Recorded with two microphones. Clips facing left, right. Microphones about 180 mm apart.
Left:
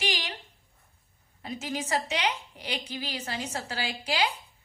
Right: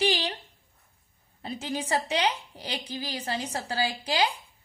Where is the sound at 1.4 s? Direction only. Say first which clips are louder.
Right 2 dB; 30° right (ahead or behind).